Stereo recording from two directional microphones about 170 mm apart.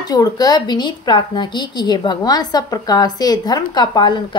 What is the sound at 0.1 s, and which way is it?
A woman's voice, 20° left (ahead or behind).